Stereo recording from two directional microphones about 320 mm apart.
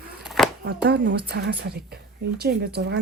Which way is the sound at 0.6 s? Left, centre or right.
Right.